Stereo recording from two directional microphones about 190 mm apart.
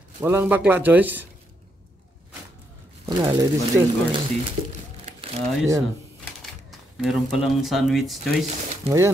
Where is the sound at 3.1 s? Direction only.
25° right (ahead or behind).